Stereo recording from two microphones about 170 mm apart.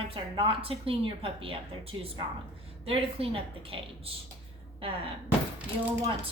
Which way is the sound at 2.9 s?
35° right (ahead or behind).